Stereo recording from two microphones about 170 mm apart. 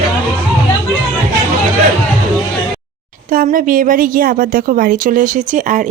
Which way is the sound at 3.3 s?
55° right (ahead or behind).